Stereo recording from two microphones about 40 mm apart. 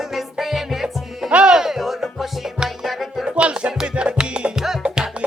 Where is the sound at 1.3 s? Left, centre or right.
Right.